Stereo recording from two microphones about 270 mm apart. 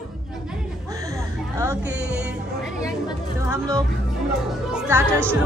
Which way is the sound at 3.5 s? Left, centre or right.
Centre.